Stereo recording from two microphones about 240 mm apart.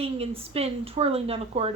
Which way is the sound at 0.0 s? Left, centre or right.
Right.